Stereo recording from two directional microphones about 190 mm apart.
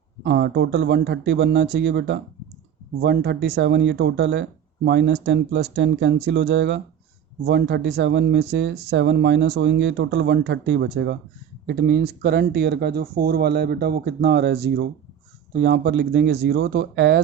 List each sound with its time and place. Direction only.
0.3 s speech: 60° right (ahead or behind)